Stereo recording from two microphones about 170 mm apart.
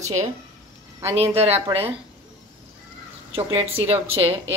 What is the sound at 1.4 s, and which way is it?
Speech, 35° right (ahead or behind).